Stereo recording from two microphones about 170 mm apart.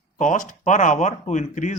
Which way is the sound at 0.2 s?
50° left (ahead or behind).